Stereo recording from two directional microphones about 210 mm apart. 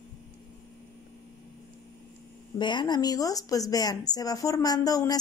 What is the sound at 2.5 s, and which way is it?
Speech, 20° left (ahead or behind).